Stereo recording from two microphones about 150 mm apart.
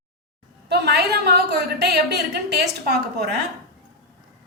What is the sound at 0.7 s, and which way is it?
A woman's voice, 90° right.